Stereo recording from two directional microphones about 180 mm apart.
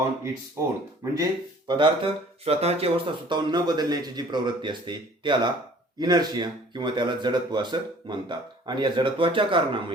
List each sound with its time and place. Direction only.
1.1 s speech: 20° right (ahead or behind)